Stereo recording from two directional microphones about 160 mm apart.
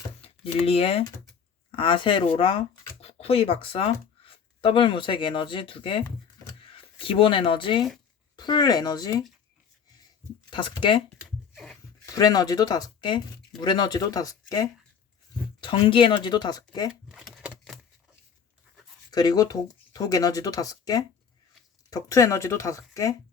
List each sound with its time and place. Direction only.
0.2 s speech: 35° left (ahead or behind)
10.5 s speech: 30° left (ahead or behind)
11.5 s a sound: centre (ahead or behind)
12.0 s speech: 20° left (ahead or behind)
17.1 s typewriter: centre (ahead or behind)
19.1 s speech: 25° left (ahead or behind)